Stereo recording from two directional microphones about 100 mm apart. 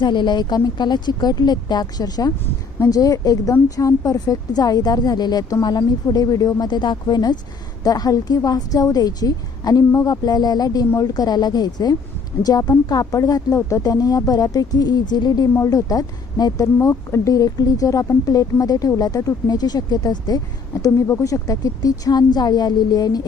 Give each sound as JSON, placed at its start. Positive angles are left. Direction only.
{"t": 0.0, "sound": "a woman's voice", "side_deg": 50}